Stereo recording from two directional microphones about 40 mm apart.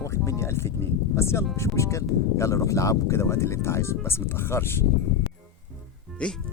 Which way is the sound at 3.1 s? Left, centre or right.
Left.